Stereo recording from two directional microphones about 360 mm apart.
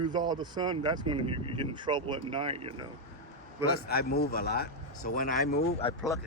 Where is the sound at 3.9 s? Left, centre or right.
Left.